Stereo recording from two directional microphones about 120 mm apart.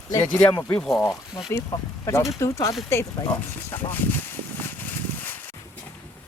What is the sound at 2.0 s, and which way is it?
Speech, 25° left (ahead or behind).